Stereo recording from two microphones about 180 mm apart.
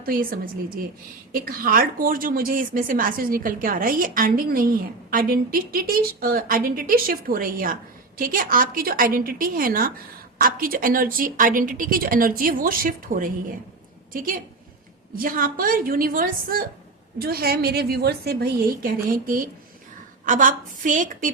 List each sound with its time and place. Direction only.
0.0 s a woman's voice: 55° right (ahead or behind)